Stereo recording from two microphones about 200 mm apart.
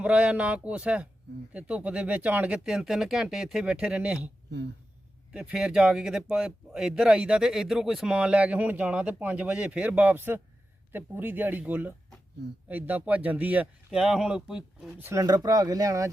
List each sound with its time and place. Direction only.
0.0 s speech: 5° right (ahead or behind)
5.3 s speech: 5° right (ahead or behind)